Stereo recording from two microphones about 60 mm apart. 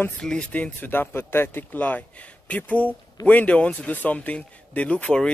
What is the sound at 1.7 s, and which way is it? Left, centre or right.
Speech, left.